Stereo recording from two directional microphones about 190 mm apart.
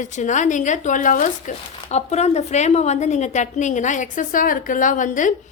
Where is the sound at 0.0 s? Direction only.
40° left (ahead or behind).